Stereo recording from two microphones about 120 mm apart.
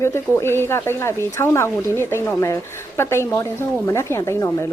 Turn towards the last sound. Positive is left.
turn(degrees=20)  # may be behind; listen again after turning